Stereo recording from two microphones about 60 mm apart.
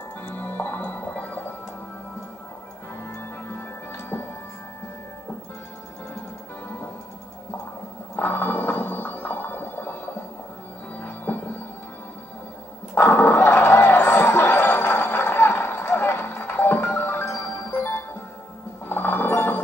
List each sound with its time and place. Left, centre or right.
0.2 s music: left
3.0 s music: left
8.2 s a sound: left
11.0 s music: left
12.9 s a sound: left
18.9 s music: left